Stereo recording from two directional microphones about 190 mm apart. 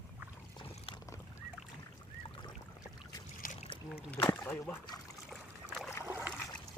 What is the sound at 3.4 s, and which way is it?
Boat, 45° left (ahead or behind).